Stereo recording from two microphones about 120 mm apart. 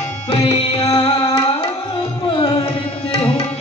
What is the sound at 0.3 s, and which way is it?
Tabla, 55° left (ahead or behind).